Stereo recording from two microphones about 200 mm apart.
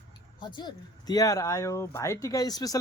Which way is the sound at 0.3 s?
20° left (ahead or behind).